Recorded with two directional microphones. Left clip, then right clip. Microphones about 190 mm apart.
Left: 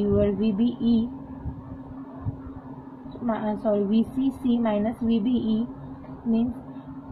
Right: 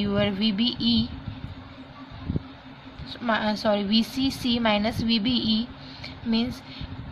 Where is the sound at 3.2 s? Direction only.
55° right (ahead or behind).